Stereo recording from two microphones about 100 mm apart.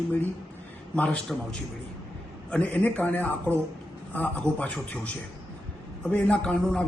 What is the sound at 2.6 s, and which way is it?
Speech, 15° left (ahead or behind).